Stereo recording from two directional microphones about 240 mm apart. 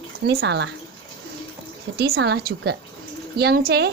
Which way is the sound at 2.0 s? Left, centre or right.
Right.